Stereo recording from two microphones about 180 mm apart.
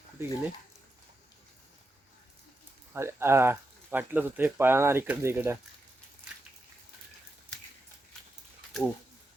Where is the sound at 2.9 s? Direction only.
15° right (ahead or behind).